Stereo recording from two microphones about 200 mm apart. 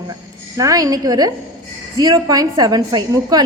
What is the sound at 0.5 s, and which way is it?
A woman's voice, 15° right (ahead or behind).